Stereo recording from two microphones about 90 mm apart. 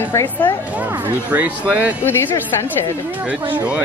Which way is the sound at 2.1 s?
25° left (ahead or behind).